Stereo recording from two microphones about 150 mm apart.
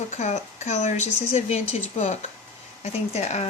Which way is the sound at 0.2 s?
50° left (ahead or behind).